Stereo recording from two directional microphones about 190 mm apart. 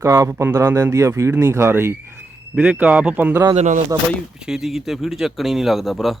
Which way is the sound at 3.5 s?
35° right (ahead or behind).